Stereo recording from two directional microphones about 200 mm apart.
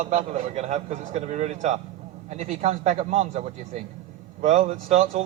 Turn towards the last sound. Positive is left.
turn(degrees=-30)  # may be behind; listen again after turning